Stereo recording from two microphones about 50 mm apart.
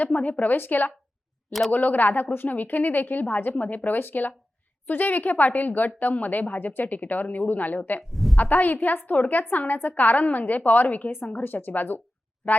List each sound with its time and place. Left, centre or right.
0.0 s a woman's voice: left
8.1 s a sound: centre
8.4 s a woman's voice: left